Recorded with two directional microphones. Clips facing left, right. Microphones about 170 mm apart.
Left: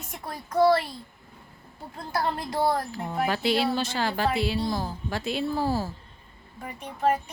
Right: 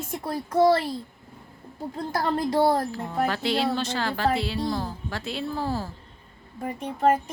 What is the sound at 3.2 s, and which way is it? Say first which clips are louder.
Speech: even; 10° left (ahead or behind).